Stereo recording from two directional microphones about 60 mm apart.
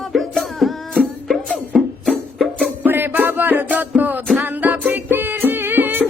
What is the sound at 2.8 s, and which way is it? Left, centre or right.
Music, right.